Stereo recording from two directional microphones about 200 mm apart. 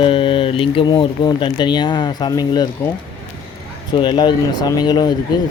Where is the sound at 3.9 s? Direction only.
25° left (ahead or behind).